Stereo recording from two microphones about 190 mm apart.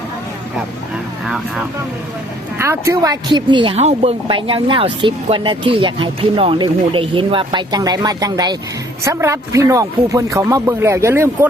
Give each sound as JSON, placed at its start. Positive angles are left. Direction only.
{"t": 2.6, "sound": "a woman's voice", "side_deg": -15}